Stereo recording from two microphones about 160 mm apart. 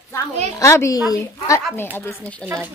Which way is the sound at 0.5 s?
20° left (ahead or behind).